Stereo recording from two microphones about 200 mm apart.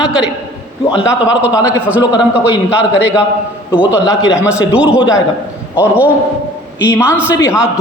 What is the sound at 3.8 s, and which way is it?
A man's voice, 5° right (ahead or behind).